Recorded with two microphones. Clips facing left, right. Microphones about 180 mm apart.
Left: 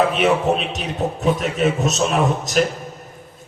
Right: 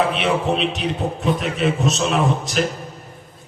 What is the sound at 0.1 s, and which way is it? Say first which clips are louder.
A man's voice: left 3 dB; 45° left (ahead or behind).